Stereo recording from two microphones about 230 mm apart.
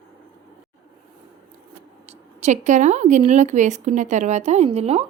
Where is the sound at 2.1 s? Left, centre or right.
Right.